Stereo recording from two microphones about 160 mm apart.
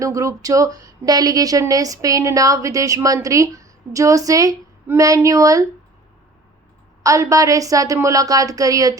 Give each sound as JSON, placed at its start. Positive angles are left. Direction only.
{"t": 0.0, "sound": "a woman's voice", "side_deg": -20}
{"t": 7.0, "sound": "a woman's voice", "side_deg": -20}